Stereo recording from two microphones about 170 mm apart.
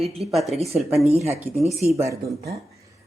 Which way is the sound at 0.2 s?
Centre (ahead or behind).